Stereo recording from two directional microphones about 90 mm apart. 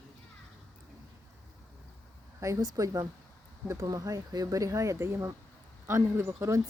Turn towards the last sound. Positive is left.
turn(degrees=-35)  # may be behind; listen again after turning